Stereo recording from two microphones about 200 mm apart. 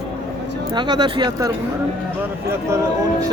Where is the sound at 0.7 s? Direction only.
20° right (ahead or behind).